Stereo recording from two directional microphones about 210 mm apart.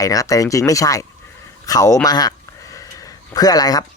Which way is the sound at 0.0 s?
15° left (ahead or behind).